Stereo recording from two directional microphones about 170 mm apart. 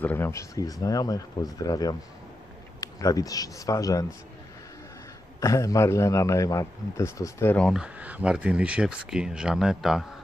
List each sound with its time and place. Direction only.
0.0 s speech: 10° left (ahead or behind)
5.4 s a man's voice: 20° left (ahead or behind)
7.7 s speech: 5° right (ahead or behind)